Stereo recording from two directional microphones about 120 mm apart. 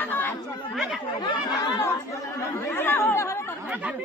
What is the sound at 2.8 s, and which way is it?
Speech, 15° left (ahead or behind).